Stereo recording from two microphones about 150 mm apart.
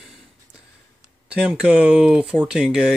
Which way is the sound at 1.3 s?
5° right (ahead or behind).